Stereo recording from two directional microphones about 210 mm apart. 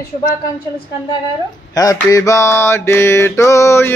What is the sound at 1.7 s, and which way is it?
Mantra, 15° left (ahead or behind).